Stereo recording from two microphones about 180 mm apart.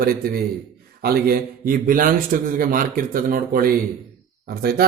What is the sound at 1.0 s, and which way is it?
A man's voice, 55° right (ahead or behind).